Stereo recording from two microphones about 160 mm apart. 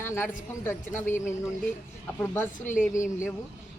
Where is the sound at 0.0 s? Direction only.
15° left (ahead or behind).